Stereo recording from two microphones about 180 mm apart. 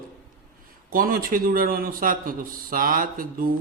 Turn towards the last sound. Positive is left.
turn(degrees=-50)  # may be behind; listen again after turning